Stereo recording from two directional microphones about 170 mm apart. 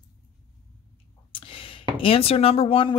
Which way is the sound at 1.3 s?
30° left (ahead or behind).